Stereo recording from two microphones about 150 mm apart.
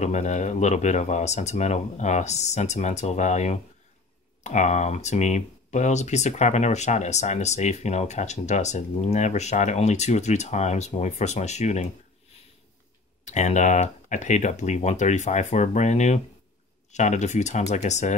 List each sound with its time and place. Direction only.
0.0 s speech: 50° left (ahead or behind)
13.2 s speech: 50° left (ahead or behind)